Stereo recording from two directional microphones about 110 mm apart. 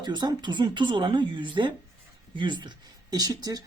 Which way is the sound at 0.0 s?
40° right (ahead or behind).